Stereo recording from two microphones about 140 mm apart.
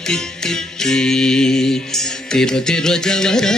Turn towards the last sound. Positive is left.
turn(degrees=5)  # may be behind; listen again after turning